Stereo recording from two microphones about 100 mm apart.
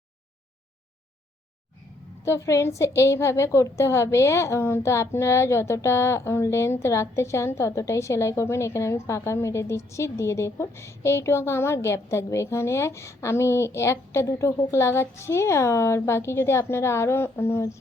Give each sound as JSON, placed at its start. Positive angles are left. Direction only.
{"t": 2.2, "sound": "a woman's voice", "side_deg": 30}